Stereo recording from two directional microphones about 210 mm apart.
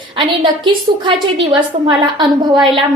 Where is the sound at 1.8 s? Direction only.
25° right (ahead or behind).